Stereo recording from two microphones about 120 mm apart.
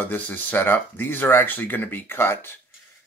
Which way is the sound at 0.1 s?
15° left (ahead or behind).